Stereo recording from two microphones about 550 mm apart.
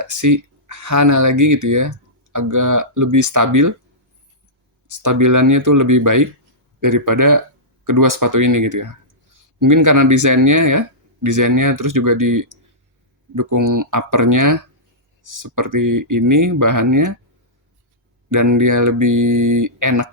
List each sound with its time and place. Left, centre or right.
0.0 s speech: right
4.9 s speech: right
18.3 s speech: right